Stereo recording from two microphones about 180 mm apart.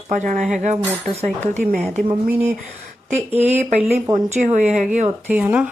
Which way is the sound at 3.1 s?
35° right (ahead or behind).